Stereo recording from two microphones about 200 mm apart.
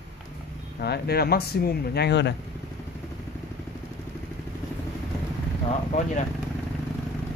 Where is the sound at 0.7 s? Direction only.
55° left (ahead or behind).